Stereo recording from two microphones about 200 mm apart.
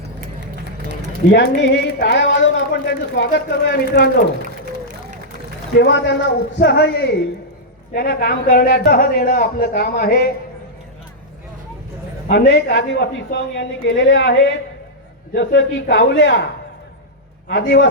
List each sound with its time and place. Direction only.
1.3 s a woman's voice: 55° left (ahead or behind)
5.8 s a woman's voice: 60° left (ahead or behind)
12.3 s a woman's voice: 50° left (ahead or behind)
15.4 s a woman's voice: 65° left (ahead or behind)
17.5 s a man's voice: 45° left (ahead or behind)